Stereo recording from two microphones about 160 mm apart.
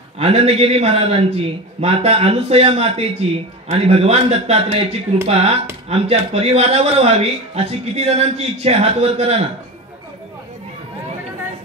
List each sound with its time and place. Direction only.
0.2 s a man's voice: 40° right (ahead or behind)